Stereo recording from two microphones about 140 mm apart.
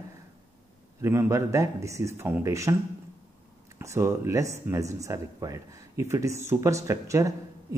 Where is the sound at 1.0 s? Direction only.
20° right (ahead or behind).